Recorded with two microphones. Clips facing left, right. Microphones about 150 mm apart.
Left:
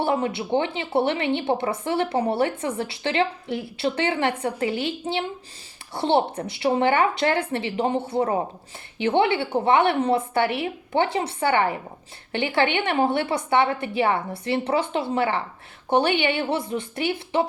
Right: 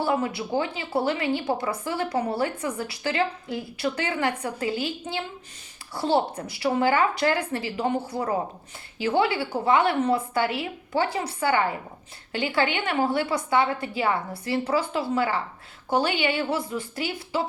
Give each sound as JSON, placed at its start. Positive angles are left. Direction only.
{"t": 0.0, "sound": "speech", "side_deg": 25}